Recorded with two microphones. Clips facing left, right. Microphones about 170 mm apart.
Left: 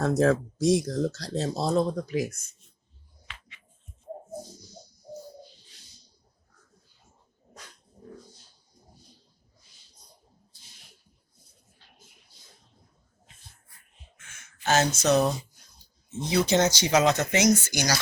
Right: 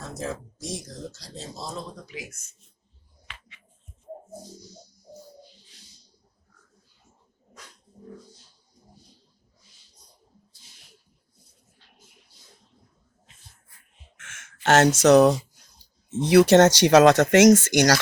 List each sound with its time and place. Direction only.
0.0 s speech: 70° left (ahead or behind)
2.0 s speech: 40° left (ahead or behind)
14.2 s a sound: 80° right
16.0 s speech: 75° right (ahead or behind)